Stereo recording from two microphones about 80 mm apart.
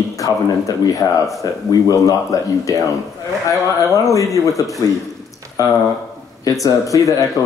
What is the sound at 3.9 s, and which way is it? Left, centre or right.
Speech, left.